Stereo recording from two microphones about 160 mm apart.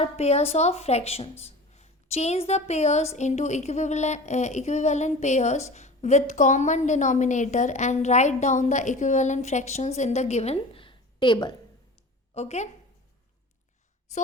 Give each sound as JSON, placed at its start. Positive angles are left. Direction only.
{"t": 0.0, "sound": "speech", "side_deg": 40}
{"t": 12.3, "sound": "a woman's voice", "side_deg": 45}